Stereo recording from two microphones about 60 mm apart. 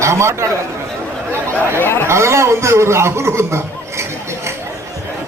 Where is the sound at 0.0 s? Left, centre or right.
Right.